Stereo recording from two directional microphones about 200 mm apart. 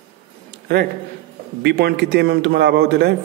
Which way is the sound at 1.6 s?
55° right (ahead or behind).